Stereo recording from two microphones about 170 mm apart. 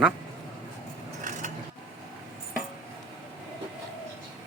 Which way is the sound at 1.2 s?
45° right (ahead or behind).